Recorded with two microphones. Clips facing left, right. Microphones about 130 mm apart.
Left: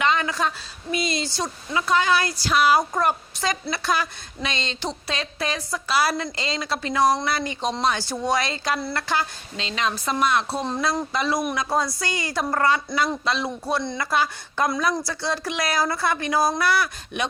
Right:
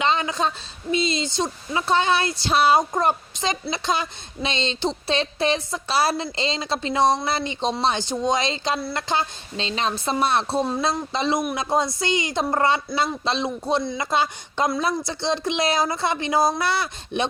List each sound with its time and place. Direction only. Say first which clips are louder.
0.0 s a woman's voice: even; 20° right (ahead or behind)